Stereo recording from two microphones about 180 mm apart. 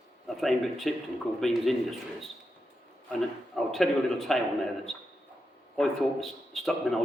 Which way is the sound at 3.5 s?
Centre (ahead or behind).